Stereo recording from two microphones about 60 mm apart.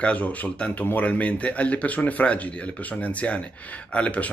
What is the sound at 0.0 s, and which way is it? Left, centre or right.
A man's voice, left.